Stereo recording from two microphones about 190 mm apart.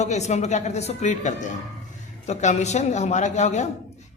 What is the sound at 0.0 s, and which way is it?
A man's voice, 35° left (ahead or behind).